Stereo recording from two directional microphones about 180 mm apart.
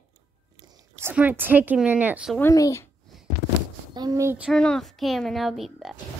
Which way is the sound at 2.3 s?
15° left (ahead or behind).